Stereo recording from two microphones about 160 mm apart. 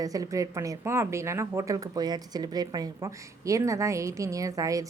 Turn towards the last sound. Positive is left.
turn(degrees=-20)  # may be behind; listen again after turning